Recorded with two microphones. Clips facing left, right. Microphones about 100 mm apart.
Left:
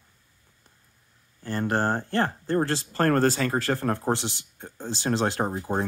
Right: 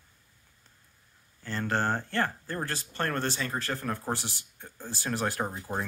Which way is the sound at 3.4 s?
65° left (ahead or behind).